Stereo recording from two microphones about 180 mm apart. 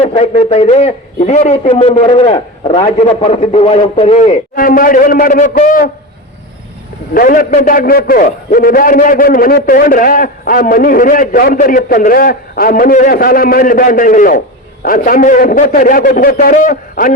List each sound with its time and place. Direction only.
0.0 s a man's voice: 35° left (ahead or behind)
7.1 s a man's voice: 50° left (ahead or behind)